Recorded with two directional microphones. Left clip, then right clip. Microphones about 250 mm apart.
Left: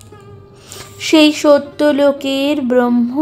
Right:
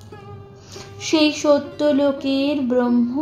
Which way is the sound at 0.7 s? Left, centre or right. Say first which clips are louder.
Left 8 dB; left.